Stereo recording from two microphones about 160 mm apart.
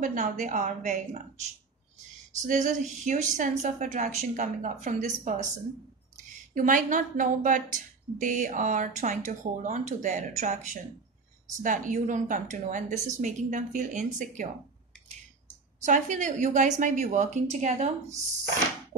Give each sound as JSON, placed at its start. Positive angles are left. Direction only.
{"t": 0.0, "sound": "a woman's voice", "side_deg": -50}
{"t": 6.5, "sound": "a woman's voice", "side_deg": -55}
{"t": 15.8, "sound": "a woman's voice", "side_deg": -50}